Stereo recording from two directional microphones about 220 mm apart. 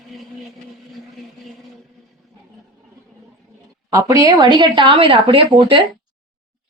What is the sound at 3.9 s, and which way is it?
Speech, 15° right (ahead or behind).